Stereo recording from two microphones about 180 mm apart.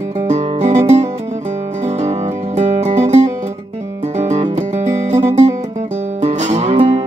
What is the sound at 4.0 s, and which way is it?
Music, 40° right (ahead or behind).